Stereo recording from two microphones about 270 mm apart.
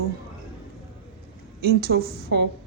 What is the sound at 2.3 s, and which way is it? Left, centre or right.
Speech, right.